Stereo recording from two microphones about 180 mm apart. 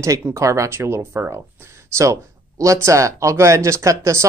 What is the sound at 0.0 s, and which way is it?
Speech, 15° right (ahead or behind).